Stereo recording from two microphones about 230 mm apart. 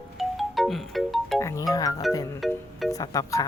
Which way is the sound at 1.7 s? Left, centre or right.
Centre.